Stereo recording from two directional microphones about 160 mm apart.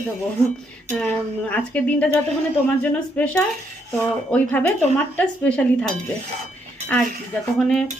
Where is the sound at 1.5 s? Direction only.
10° left (ahead or behind).